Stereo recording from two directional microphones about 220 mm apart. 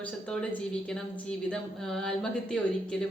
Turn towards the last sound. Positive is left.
turn(degrees=5)  # may be behind; listen again after turning